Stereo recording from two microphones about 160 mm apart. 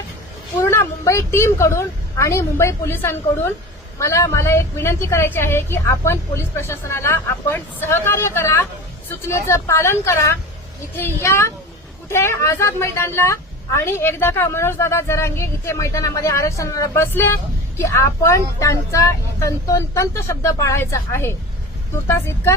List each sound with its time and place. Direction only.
0.6 s a woman's voice: 15° left (ahead or behind)